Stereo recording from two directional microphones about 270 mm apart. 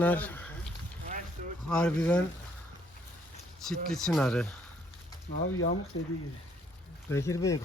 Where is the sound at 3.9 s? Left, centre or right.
Centre.